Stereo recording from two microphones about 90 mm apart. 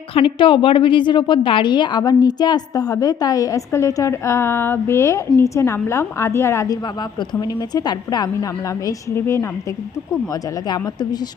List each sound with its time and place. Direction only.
0.1 s a woman's voice: 85° left; by 6.7 s 30° left (ahead or behind)
7.4 s a woman's voice: 50° left (ahead or behind)
9.1 s a woman's voice: 30° left (ahead or behind)